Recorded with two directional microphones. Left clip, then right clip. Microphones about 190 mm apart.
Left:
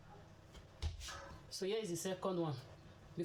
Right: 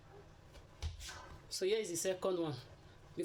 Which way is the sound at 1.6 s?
50° right (ahead or behind).